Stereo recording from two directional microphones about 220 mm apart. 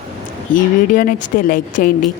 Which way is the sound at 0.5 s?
40° left (ahead or behind).